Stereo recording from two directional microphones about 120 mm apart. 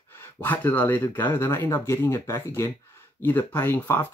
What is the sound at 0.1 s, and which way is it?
Speech, 15° left (ahead or behind).